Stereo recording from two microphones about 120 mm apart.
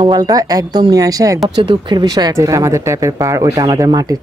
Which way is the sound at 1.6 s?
40° right (ahead or behind).